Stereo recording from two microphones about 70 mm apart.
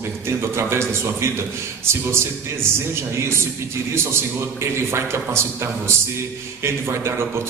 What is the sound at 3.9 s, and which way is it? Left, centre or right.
A man's voice, right.